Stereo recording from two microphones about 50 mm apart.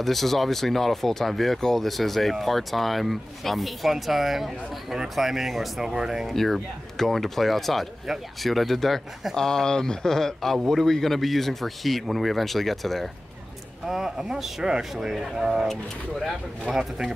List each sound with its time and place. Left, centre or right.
0.0 s a man's voice: centre
6.3 s speech: centre
13.8 s a man's voice: centre
15.7 s speech: centre
16.7 s a man's voice: centre